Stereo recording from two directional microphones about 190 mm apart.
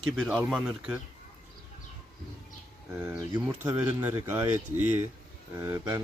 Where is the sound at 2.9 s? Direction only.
15° right (ahead or behind).